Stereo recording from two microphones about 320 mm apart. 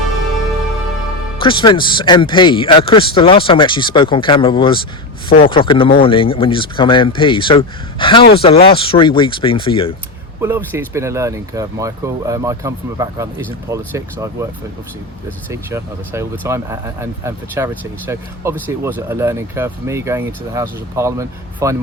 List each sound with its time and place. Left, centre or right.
1.4 s speech: centre
10.4 s speech: centre
15.4 s speech: centre